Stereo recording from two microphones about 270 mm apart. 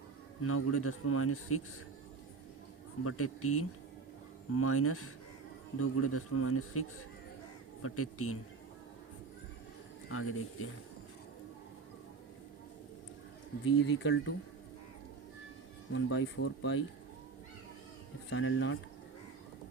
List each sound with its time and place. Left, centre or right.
0.4 s speech: left
3.0 s speech: left
10.1 s speech: left
13.7 s speech: left
15.9 s speech: left
18.3 s speech: left